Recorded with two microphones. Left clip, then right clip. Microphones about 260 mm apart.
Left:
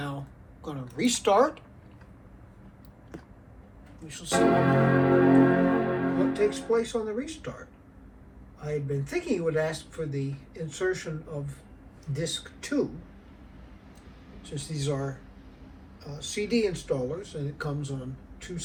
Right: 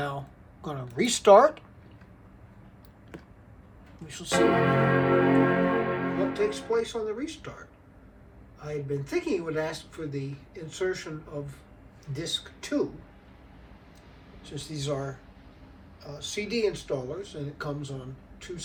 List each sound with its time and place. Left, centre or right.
0.6 s speech: right
4.0 s speech: right
4.3 s music: centre
6.3 s speech: centre
8.6 s speech: centre
12.1 s speech: centre
14.4 s a man's voice: centre